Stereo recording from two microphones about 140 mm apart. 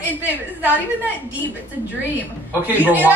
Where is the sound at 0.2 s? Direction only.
10° right (ahead or behind).